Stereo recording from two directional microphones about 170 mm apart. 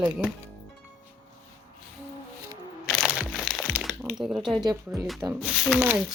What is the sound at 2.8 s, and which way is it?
Crumpling, centre (ahead or behind).